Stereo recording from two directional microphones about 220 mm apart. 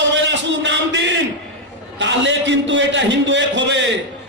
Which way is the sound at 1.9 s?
55° right (ahead or behind).